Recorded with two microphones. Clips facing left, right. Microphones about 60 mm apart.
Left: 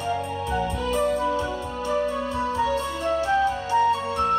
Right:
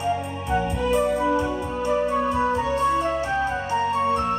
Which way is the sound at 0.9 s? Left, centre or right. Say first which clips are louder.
Right 3 dB; centre.